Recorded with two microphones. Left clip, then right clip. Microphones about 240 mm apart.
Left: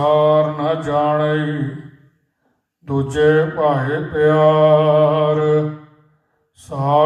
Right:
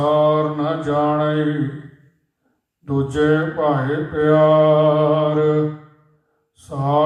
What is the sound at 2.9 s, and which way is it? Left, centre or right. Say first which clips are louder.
Mantra: left 3 dB; left.